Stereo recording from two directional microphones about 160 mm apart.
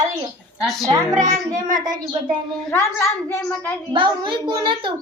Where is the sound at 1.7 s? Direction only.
25° right (ahead or behind).